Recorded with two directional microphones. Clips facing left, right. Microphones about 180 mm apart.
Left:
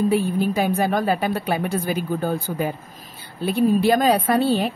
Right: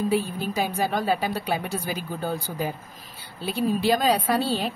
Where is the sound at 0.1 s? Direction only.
55° left (ahead or behind).